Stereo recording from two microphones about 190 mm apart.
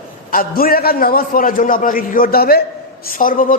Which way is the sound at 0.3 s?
50° left (ahead or behind).